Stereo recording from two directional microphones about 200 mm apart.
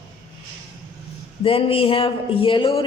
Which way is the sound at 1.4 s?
25° left (ahead or behind).